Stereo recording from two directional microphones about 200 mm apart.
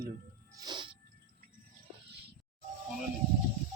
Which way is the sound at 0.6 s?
20° right (ahead or behind).